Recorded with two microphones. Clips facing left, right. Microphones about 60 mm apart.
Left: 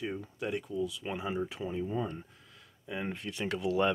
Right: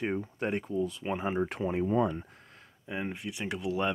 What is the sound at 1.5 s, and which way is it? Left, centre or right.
Speech, right.